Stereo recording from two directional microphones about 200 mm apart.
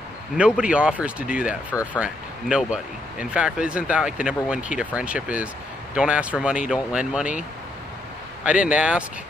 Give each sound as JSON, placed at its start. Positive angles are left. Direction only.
{"t": 0.4, "sound": "speech", "side_deg": -5}
{"t": 8.5, "sound": "speech", "side_deg": -5}